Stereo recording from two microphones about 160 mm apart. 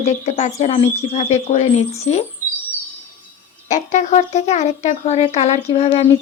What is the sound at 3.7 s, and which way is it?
Speech, 50° left (ahead or behind).